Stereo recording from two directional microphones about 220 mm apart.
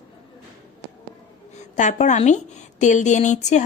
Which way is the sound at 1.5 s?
35° left (ahead or behind).